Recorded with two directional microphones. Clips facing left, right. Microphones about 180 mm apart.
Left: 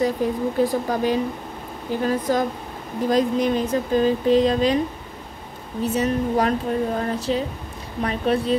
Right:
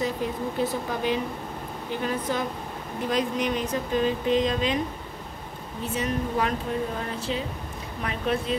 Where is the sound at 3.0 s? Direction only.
35° left (ahead or behind).